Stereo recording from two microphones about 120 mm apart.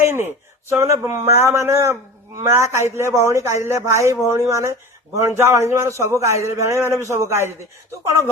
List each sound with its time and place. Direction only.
0.0 s speech: 20° right (ahead or behind)